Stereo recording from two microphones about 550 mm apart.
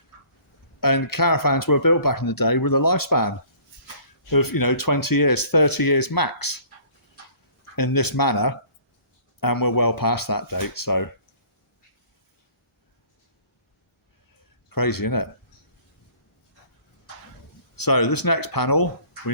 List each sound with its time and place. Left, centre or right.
0.8 s speech: left
7.8 s speech: left
14.7 s speech: left
17.7 s speech: left